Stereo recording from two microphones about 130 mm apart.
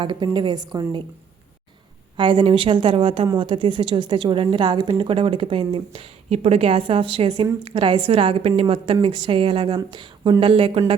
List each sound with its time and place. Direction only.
0.0 s a woman's voice: 35° right (ahead or behind)
2.1 s a woman's voice: 40° right (ahead or behind)